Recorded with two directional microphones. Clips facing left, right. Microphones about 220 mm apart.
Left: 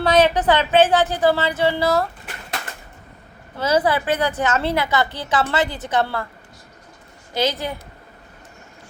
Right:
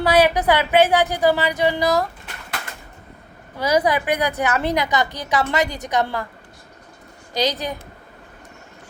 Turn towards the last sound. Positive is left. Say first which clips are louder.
# even
turn(degrees=-15)  # may be behind; listen again after turning